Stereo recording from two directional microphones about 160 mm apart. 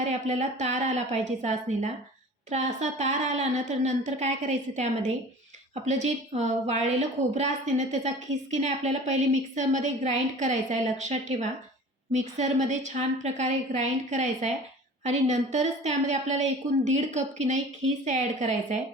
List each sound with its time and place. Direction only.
0.0 s a woman's voice: 45° right (ahead or behind)